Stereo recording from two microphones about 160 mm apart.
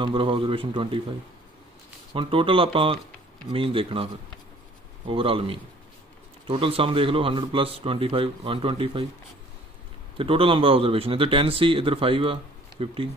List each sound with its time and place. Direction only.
0.0 s speech: 30° right (ahead or behind)
2.1 s speech: 35° right (ahead or behind)
10.1 s speech: 35° right (ahead or behind)